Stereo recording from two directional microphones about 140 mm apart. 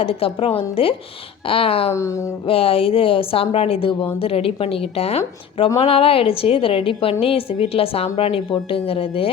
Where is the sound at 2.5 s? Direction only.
45° left (ahead or behind).